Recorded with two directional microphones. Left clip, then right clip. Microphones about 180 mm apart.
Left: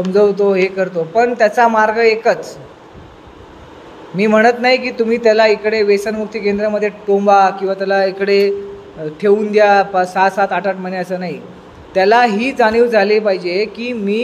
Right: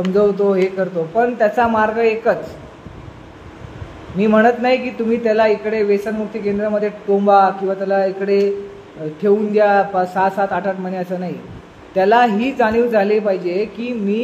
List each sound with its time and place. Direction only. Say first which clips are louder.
0.0 s speech: left 3 dB; 30° left (ahead or behind)
4.2 s speech: left 2 dB; 35° left (ahead or behind)